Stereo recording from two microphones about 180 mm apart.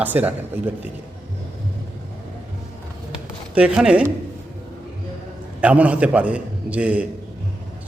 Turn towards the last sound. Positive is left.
turn(degrees=-5)  # may be behind; listen again after turning